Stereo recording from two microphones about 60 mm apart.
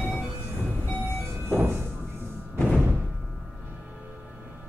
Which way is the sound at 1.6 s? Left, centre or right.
Right.